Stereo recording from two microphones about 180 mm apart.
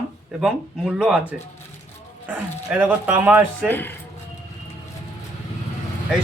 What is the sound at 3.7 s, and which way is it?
Speech, 10° left (ahead or behind).